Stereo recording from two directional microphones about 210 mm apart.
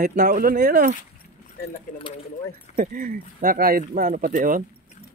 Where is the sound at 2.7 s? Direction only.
40° right (ahead or behind).